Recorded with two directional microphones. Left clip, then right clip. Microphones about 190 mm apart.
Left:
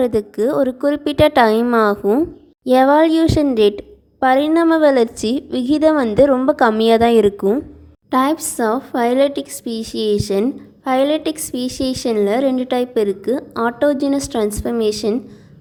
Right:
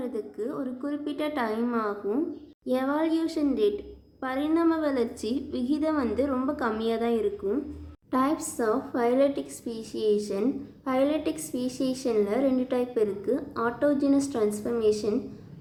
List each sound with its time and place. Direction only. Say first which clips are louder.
0.0 s a woman's voice: left 16 dB; 50° left (ahead or behind)